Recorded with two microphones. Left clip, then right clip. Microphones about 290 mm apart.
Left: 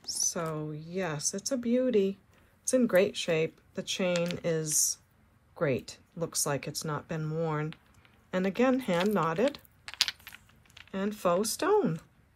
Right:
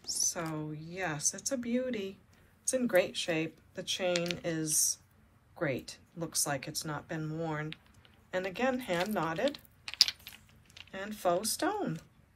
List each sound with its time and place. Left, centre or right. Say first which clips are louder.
0.0 s speech: left 2 dB; centre